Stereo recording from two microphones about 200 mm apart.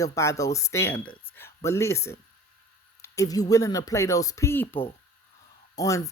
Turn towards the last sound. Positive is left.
turn(degrees=15)  # may be behind; listen again after turning